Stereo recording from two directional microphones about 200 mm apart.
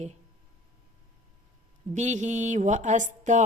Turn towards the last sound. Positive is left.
turn(degrees=-35)  # may be behind; listen again after turning